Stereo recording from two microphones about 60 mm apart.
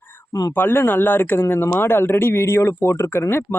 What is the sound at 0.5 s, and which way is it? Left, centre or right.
Speech, left.